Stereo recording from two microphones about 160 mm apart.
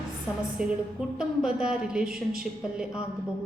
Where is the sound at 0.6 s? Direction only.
5° right (ahead or behind).